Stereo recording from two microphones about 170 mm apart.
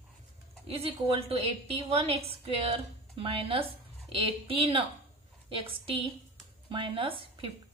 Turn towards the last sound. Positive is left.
turn(degrees=-30)  # may be behind; listen again after turning